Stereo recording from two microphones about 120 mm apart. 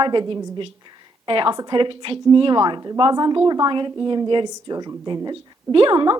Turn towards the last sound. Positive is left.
turn(degrees=-40)  # may be behind; listen again after turning